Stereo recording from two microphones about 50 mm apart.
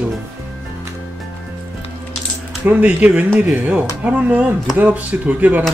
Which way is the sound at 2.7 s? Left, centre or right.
Right.